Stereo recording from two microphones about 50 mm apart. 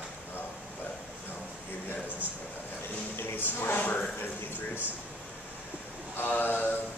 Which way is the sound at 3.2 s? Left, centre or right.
Left.